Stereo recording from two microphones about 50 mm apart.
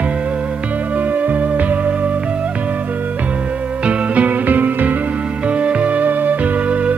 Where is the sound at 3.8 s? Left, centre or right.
Right.